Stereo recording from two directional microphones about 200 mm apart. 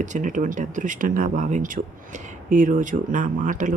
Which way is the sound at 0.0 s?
40° right (ahead or behind).